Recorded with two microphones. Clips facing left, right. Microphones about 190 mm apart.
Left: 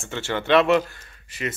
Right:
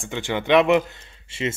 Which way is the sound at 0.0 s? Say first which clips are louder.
Right 1 dB; 15° right (ahead or behind).